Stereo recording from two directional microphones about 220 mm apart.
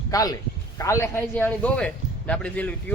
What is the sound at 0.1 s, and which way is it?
A man's voice, 15° left (ahead or behind).